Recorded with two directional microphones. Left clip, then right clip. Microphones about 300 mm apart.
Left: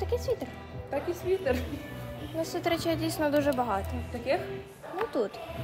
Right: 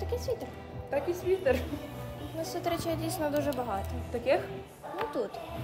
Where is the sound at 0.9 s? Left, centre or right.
Centre.